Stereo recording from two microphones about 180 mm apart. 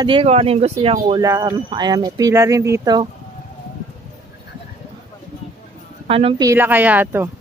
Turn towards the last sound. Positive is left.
turn(degrees=-10)  # may be behind; listen again after turning